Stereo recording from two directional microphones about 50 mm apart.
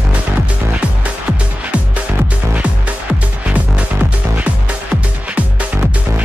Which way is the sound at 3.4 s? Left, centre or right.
Right.